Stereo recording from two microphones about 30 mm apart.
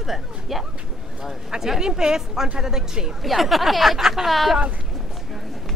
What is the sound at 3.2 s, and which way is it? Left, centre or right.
Speech, centre.